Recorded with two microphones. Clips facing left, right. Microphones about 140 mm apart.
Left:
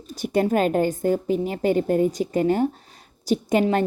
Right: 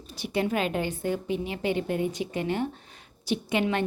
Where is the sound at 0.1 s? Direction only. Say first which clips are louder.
Left 7 dB; 45° left (ahead or behind).